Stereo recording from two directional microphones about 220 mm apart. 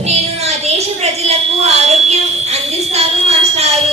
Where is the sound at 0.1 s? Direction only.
30° right (ahead or behind).